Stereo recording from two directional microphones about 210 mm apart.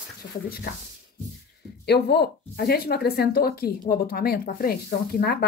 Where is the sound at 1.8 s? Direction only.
50° left (ahead or behind).